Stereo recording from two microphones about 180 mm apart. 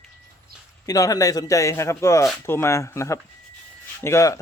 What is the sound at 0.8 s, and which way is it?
Speech, 20° left (ahead or behind).